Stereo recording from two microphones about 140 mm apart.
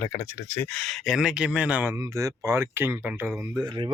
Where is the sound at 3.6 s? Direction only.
35° right (ahead or behind).